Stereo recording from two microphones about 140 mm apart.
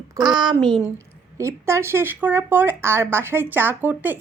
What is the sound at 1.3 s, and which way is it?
Speech, 20° right (ahead or behind).